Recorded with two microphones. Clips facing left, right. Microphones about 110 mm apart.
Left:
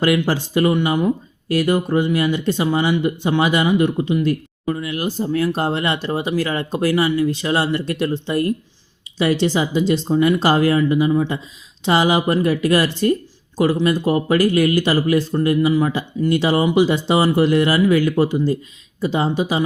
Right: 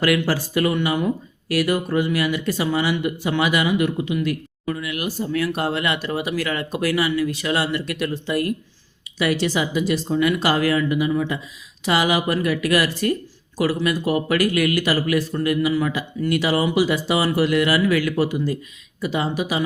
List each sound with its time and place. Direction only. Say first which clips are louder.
0.0 s speech: left 2 dB; 25° left (ahead or behind)